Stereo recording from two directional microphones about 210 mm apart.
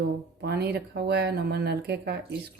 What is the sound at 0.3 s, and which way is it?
Speech, 50° right (ahead or behind).